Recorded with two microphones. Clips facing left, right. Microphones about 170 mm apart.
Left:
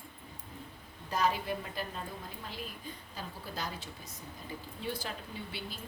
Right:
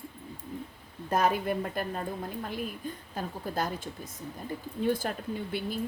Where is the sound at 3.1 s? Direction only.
50° right (ahead or behind).